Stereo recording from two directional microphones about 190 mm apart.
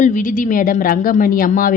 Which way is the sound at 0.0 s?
40° left (ahead or behind).